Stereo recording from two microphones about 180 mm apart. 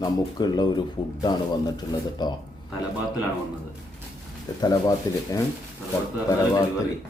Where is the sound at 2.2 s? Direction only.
25° left (ahead or behind).